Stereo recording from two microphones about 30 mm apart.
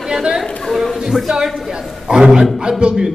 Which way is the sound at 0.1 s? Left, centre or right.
Right.